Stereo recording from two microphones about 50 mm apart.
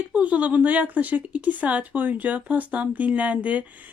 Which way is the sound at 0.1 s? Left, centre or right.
Right.